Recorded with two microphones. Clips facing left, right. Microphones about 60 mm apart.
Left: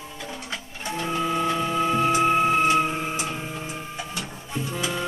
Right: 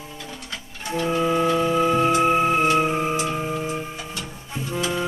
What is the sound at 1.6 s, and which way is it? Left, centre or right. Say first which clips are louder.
Music: right 3 dB; centre.